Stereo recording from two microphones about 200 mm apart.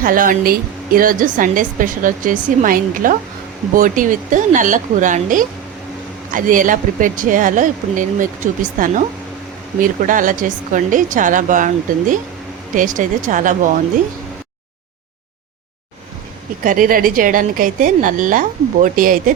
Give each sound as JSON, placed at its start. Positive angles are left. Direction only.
{"t": 0.0, "sound": "a woman's voice", "side_deg": -40}
{"t": 10.0, "sound": "speech", "side_deg": -40}
{"t": 16.6, "sound": "a woman's voice", "side_deg": -45}